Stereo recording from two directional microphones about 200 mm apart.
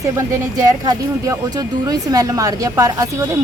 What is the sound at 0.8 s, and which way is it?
A woman's voice, 15° right (ahead or behind).